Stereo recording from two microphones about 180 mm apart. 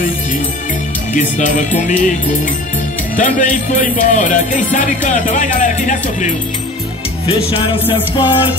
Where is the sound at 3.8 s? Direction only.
45° left (ahead or behind).